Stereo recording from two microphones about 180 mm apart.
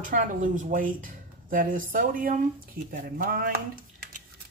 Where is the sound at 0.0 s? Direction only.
45° right (ahead or behind).